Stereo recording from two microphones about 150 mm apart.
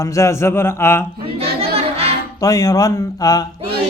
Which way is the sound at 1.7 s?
45° right (ahead or behind).